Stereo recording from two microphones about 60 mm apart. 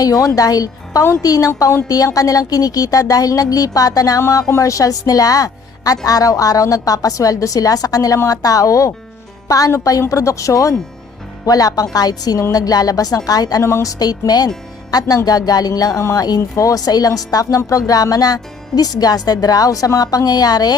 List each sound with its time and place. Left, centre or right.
0.0 s a woman's voice: left
4.2 s speech: left
4.6 s a woman's voice: left
9.5 s a woman's voice: left
10.1 s speech: left
11.4 s speech: left
13.6 s speech: left
13.8 s speech: left
16.1 s speech: left